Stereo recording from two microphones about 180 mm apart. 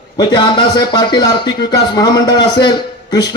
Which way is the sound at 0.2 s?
25° left (ahead or behind).